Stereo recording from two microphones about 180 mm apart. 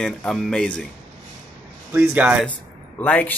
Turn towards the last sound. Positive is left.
turn(degrees=10)  # may be behind; listen again after turning